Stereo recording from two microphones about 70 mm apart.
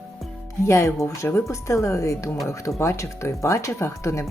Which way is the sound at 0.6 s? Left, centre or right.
Left.